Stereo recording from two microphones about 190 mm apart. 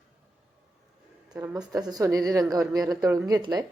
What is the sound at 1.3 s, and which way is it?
A woman's voice, 10° right (ahead or behind).